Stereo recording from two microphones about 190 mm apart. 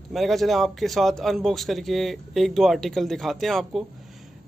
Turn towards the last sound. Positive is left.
turn(degrees=0)  # may be behind; listen again after turning